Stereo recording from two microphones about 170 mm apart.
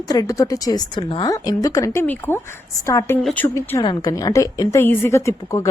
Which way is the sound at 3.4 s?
10° left (ahead or behind).